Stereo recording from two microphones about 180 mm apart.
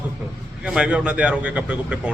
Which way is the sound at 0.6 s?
5° right (ahead or behind).